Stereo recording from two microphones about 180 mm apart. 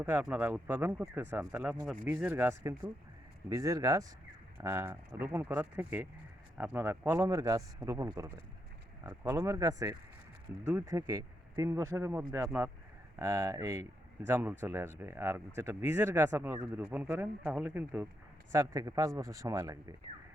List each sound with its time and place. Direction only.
0.0 s speech: 10° right (ahead or behind)